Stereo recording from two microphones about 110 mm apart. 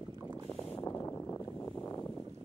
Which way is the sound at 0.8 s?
25° left (ahead or behind).